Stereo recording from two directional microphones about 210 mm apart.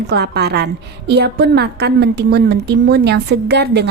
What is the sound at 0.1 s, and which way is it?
A woman's voice, 50° right (ahead or behind).